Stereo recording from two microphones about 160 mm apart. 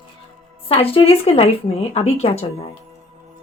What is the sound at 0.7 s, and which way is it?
Speech, 35° left (ahead or behind).